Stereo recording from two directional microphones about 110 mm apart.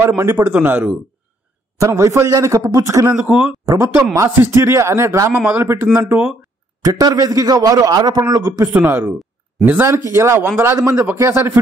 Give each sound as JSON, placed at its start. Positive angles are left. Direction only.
{"t": 0.0, "sound": "a man's voice", "side_deg": -25}
{"t": 1.8, "sound": "a man's voice", "side_deg": -25}
{"t": 3.6, "sound": "a man's voice", "side_deg": -30}
{"t": 6.8, "sound": "a man's voice", "side_deg": -35}
{"t": 8.7, "sound": "a man's voice", "side_deg": -20}